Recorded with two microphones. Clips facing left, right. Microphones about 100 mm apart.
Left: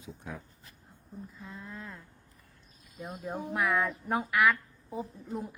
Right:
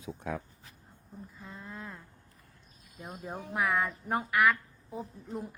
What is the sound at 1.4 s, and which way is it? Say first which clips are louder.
Speech: right 2 dB; centre (ahead or behind).